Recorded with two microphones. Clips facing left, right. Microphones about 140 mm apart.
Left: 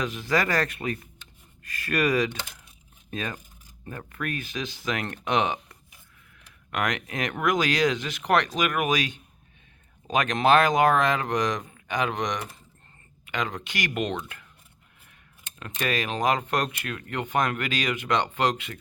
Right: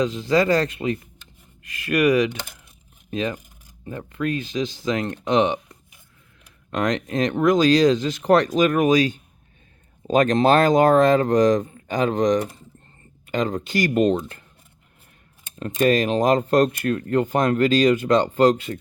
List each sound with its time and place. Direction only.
0.0 s speech: 25° right (ahead or behind)
1.9 s speech: 15° right (ahead or behind); by 14.4 s 35° right (ahead or behind)
15.5 s speech: 35° right (ahead or behind)